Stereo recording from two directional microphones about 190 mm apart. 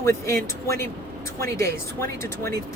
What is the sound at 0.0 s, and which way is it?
Speech, 15° left (ahead or behind).